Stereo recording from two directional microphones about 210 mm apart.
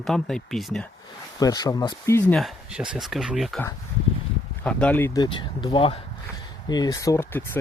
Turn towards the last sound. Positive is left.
turn(degrees=10)  # may be behind; listen again after turning